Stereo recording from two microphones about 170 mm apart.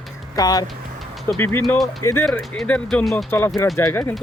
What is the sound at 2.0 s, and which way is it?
Speech, 15° left (ahead or behind).